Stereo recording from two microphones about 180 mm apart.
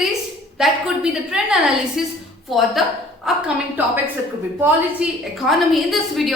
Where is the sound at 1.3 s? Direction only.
5° right (ahead or behind).